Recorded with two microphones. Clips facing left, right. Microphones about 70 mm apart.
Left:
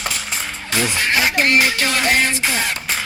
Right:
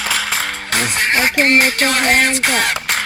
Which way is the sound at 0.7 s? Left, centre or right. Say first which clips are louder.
Right 1 dB; right.